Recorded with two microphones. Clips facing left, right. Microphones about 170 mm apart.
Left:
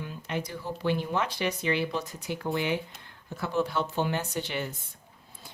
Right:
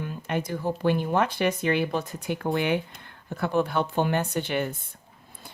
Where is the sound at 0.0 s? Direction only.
50° right (ahead or behind).